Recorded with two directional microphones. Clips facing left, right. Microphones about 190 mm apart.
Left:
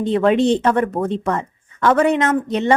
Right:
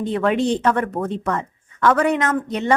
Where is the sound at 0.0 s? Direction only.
25° left (ahead or behind).